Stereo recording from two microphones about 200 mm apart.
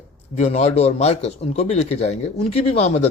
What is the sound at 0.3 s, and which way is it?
Speech, 35° left (ahead or behind).